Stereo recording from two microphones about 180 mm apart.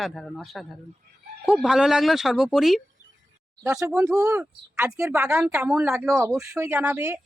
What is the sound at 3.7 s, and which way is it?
Speech, 15° right (ahead or behind).